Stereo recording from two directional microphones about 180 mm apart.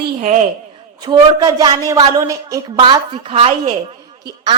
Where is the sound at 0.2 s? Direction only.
45° right (ahead or behind).